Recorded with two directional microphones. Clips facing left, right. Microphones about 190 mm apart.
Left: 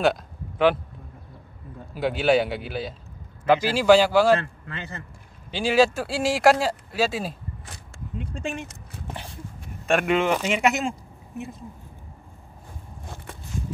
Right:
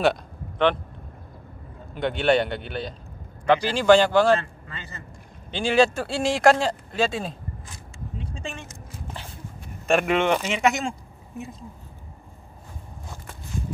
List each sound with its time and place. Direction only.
0.0 s a sound: 5° left (ahead or behind)
2.0 s speech: 5° left (ahead or behind)
4.4 s speech: 60° left (ahead or behind)
5.5 s speech: 5° left (ahead or behind)
9.8 s speech: centre (ahead or behind)